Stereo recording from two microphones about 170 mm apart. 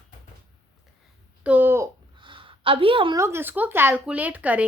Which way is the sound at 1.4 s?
10° right (ahead or behind).